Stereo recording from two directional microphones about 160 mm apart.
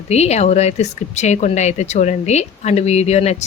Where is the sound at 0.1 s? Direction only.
45° left (ahead or behind).